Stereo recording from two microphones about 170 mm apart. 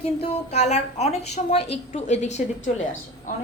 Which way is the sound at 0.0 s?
40° left (ahead or behind).